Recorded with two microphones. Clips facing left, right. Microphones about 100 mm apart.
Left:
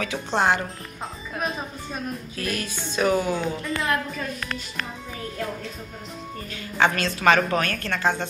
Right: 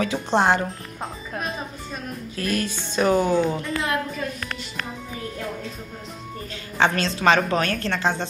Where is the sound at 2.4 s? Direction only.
35° right (ahead or behind).